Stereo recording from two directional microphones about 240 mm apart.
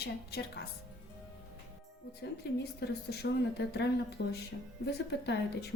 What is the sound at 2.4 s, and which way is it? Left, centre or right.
A woman's voice, left.